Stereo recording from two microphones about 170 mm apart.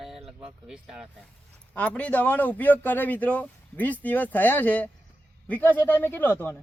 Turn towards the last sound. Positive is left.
turn(degrees=10)  # may be behind; listen again after turning